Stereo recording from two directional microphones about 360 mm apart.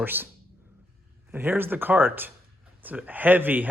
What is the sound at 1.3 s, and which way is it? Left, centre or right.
Speech, centre.